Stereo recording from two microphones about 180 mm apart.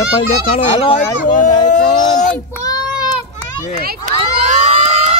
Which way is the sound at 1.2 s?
45° left (ahead or behind).